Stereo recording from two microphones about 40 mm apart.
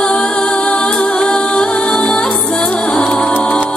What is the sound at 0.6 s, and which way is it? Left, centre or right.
Music, left.